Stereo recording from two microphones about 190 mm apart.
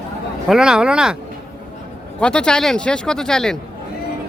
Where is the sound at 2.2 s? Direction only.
5° left (ahead or behind).